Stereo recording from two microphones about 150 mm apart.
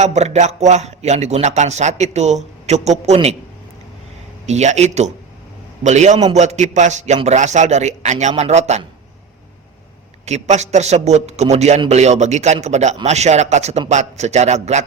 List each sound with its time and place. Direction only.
0.0 s speech: 45° right (ahead or behind)
4.4 s speech: 50° right (ahead or behind)
10.2 s speech: 50° right (ahead or behind)